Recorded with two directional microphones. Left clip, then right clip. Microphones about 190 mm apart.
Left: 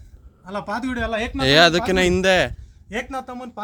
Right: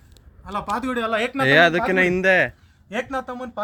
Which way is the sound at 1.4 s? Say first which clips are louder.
Left 1 dB; 15° left (ahead or behind).